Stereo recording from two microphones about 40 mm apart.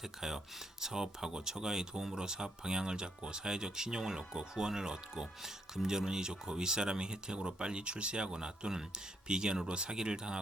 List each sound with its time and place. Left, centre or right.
0.8 s speech: centre